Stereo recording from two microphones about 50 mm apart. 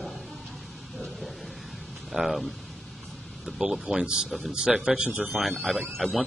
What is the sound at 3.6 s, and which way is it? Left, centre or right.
Speech, centre.